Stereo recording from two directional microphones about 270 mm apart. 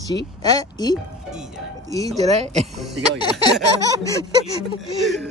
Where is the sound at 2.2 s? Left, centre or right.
Right.